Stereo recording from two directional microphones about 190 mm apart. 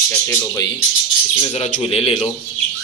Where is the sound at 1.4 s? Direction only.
30° left (ahead or behind).